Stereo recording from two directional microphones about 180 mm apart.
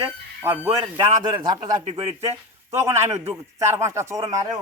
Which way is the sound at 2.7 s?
15° right (ahead or behind).